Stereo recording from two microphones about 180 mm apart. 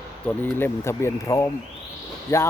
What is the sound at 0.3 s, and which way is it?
Speech, 10° left (ahead or behind).